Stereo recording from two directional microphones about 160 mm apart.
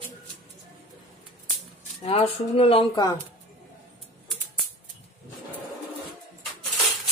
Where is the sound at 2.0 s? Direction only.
40° left (ahead or behind).